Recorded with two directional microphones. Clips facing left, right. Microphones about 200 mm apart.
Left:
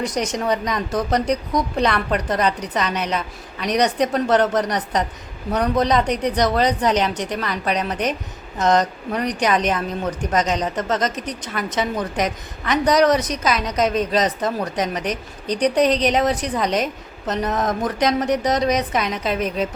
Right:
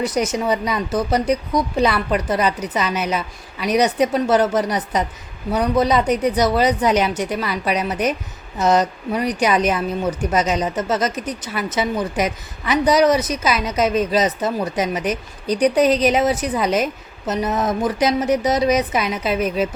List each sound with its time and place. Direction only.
0.0 s a woman's voice: 5° right (ahead or behind)